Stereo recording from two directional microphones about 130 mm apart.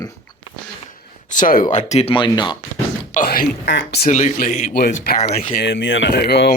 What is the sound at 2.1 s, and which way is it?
Speech, 35° left (ahead or behind).